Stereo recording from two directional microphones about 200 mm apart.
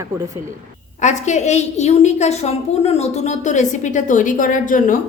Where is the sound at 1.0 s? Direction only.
35° left (ahead or behind).